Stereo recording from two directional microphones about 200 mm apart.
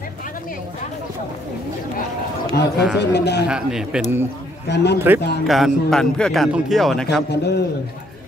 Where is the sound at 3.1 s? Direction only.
55° left (ahead or behind).